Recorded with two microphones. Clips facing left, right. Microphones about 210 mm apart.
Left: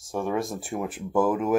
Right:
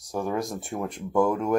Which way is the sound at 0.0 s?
Centre (ahead or behind).